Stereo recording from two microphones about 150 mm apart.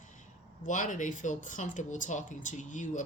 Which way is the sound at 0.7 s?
55° left (ahead or behind).